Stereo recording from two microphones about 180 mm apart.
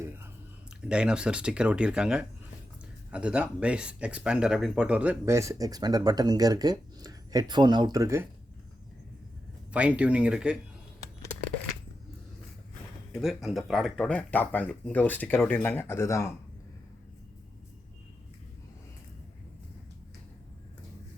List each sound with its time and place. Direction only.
0.9 s speech: 5° right (ahead or behind)
9.7 s speech: 5° right (ahead or behind)
13.1 s speech: centre (ahead or behind); by 16.3 s 15° left (ahead or behind)